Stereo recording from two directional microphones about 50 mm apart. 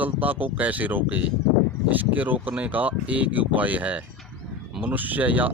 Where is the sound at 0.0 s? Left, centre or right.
Right.